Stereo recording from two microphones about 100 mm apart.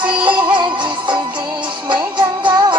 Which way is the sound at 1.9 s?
55° right (ahead or behind).